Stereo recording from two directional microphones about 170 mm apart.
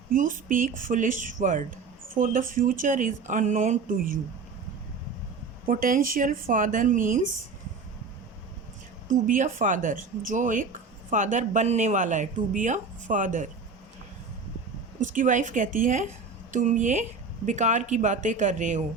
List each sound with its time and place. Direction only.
0.1 s speech: 50° right (ahead or behind)
5.6 s speech: 55° right (ahead or behind)
9.0 s speech: 50° right (ahead or behind)
15.0 s speech: 50° right (ahead or behind)